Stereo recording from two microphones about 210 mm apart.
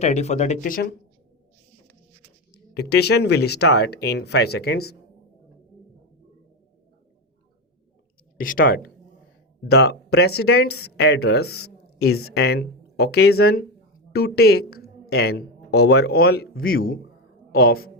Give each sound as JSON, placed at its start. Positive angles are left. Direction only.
{"t": 0.0, "sound": "speech", "side_deg": 30}
{"t": 2.5, "sound": "speech", "side_deg": 50}
{"t": 8.4, "sound": "a woman's voice", "side_deg": 40}